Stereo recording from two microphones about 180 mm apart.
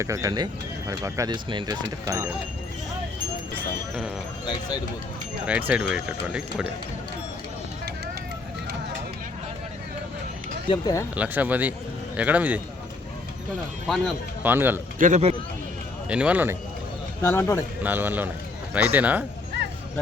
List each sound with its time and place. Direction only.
0.0 s speech: 20° right (ahead or behind)
5.5 s speech: 10° right (ahead or behind)
10.7 s speech: 20° left (ahead or behind)
11.1 s speech: 10° right (ahead or behind)
14.4 s speech: 10° right (ahead or behind)
14.9 s speech: 45° right (ahead or behind)
16.0 s speech: 5° right (ahead or behind)
17.2 s speech: 15° left (ahead or behind)
17.8 s speech: 10° right (ahead or behind)